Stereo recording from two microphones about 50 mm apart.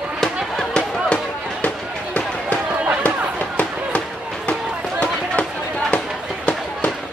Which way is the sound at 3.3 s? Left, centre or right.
Left.